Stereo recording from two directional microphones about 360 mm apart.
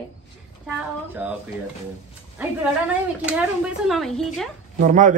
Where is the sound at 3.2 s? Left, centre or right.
Centre.